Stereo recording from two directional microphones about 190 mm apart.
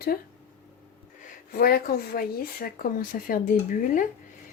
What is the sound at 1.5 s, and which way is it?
Speech, 50° left (ahead or behind).